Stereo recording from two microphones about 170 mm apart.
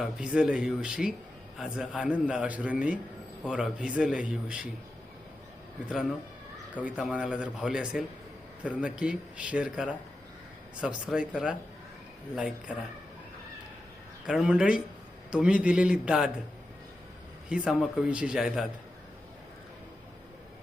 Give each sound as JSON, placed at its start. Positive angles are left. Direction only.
{"t": 0.0, "sound": "a man's voice", "side_deg": -5}
{"t": 6.7, "sound": "speech", "side_deg": -5}
{"t": 14.3, "sound": "speech", "side_deg": -5}
{"t": 17.5, "sound": "speech", "side_deg": -5}